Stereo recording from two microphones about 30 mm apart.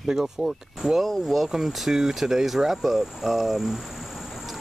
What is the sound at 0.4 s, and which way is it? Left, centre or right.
Speech, right.